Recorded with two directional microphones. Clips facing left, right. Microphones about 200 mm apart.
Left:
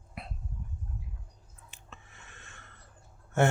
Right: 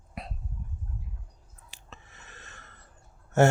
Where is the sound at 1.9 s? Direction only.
40° right (ahead or behind).